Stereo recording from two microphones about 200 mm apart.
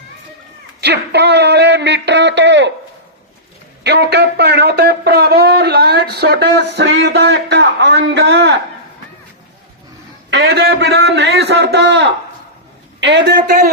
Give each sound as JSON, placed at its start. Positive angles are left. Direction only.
{"t": 0.8, "sound": "speech", "side_deg": -55}
{"t": 3.8, "sound": "speech", "side_deg": -55}
{"t": 10.2, "sound": "speech", "side_deg": -60}